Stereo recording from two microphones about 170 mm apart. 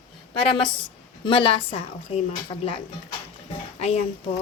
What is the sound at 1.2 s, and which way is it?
A woman's voice, 30° left (ahead or behind).